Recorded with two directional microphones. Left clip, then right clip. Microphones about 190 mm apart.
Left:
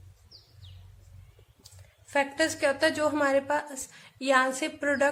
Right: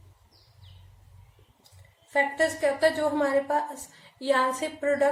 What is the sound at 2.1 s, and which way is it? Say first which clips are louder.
A woman's voice: right 2 dB; 40° left (ahead or behind).